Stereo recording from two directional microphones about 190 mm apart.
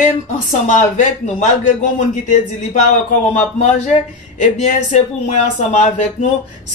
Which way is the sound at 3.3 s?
35° left (ahead or behind).